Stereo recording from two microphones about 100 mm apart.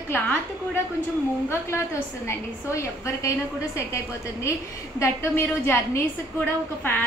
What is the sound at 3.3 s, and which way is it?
Speech, 30° left (ahead or behind).